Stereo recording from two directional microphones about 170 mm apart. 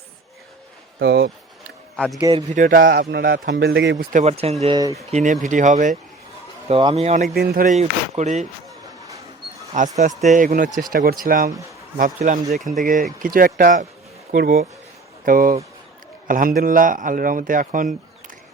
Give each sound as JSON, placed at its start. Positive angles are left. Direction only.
{"t": 0.9, "sound": "speech", "side_deg": -80}
{"t": 2.0, "sound": "speech", "side_deg": 0}
{"t": 2.5, "sound": "a man's voice", "side_deg": -50}
{"t": 3.9, "sound": "speech", "side_deg": -40}
{"t": 4.6, "sound": "speech", "side_deg": -25}
{"t": 5.1, "sound": "a man's voice", "side_deg": -45}
{"t": 6.7, "sound": "speech", "side_deg": -35}
{"t": 7.3, "sound": "a man's voice", "side_deg": -60}
{"t": 7.8, "sound": "speech", "side_deg": -40}
{"t": 9.7, "sound": "a man's voice", "side_deg": -45}
{"t": 12.5, "sound": "speech", "side_deg": 0}
{"t": 12.8, "sound": "a man's voice", "side_deg": -50}